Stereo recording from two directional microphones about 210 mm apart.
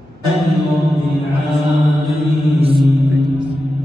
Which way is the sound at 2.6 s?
25° right (ahead or behind).